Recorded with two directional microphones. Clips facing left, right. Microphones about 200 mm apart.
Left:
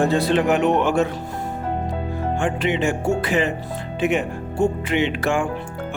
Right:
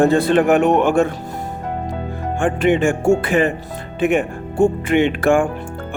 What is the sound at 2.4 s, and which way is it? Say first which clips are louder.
Speech: right 7 dB; 50° right (ahead or behind).